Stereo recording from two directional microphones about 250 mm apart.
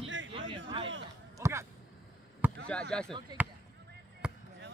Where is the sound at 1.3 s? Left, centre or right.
Centre.